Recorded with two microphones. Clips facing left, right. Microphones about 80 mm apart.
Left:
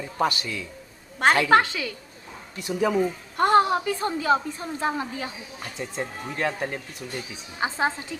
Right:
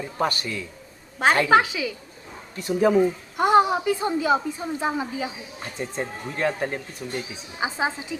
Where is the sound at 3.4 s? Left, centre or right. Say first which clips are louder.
Right 1 dB; centre.